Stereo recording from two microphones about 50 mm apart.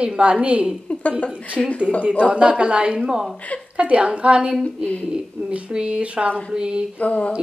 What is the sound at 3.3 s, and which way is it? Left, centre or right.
Speech, left.